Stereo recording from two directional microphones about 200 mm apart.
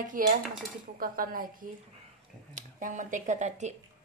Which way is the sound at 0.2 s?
45° right (ahead or behind).